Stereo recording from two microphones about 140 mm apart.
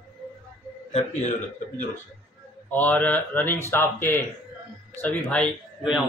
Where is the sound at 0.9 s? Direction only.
55° left (ahead or behind).